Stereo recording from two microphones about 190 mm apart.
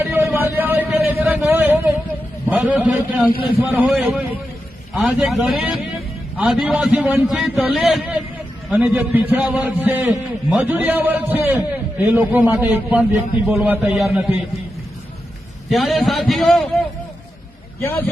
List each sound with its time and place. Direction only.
0.0 s vehicle: 10° right (ahead or behind)
2.5 s a man's voice: 5° right (ahead or behind)
15.7 s a man's voice: centre (ahead or behind)